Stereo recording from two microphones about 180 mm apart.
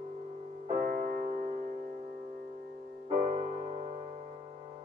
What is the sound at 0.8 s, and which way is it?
Music, 45° right (ahead or behind).